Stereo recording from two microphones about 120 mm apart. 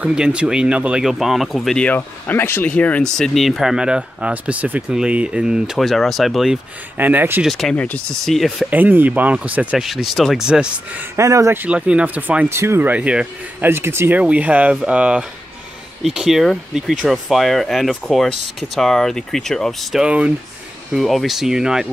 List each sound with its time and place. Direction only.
0.0 s speech: 10° right (ahead or behind)
1.9 s speech: 15° left (ahead or behind); by 6.6 s centre (ahead or behind)
7.0 s speech: 15° right (ahead or behind)
7.4 s speech: centre (ahead or behind)
7.7 s speech: 10° left (ahead or behind)
8.4 s speech: 5° right (ahead or behind)
8.7 s speech: 15° right (ahead or behind)
11.1 s speech: 25° right (ahead or behind); by 21.8 s 5° right (ahead or behind)